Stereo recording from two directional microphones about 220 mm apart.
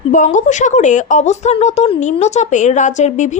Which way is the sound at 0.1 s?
35° left (ahead or behind).